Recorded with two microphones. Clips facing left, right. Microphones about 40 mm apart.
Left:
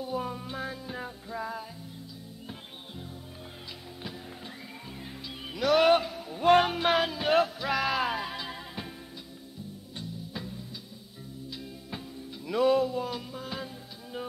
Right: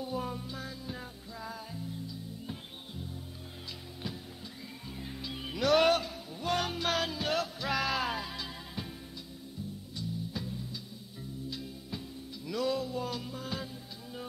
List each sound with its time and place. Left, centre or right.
0.0 s music: centre
0.4 s music: left
5.0 s music: centre
5.9 s a sound: centre
6.6 s music: left
12.4 s music: left
12.9 s music: centre